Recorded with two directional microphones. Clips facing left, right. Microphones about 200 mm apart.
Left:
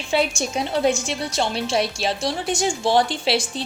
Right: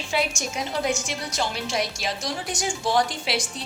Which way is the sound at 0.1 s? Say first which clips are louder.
Left 5 dB; 30° left (ahead or behind).